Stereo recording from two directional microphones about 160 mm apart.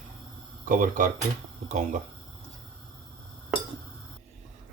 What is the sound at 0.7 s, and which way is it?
Speech, 55° right (ahead or behind).